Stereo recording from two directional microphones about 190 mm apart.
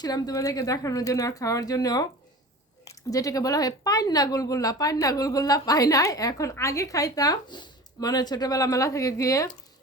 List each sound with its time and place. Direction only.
0.0 s a woman's voice: 20° left (ahead or behind)